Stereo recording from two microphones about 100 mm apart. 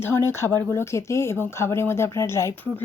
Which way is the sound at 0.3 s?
25° left (ahead or behind).